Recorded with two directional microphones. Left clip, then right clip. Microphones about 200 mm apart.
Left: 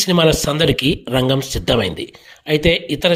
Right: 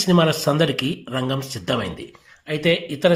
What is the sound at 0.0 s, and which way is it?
Speech, 40° left (ahead or behind).